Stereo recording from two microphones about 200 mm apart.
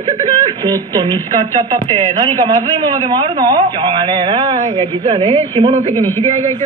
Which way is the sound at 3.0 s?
20° right (ahead or behind).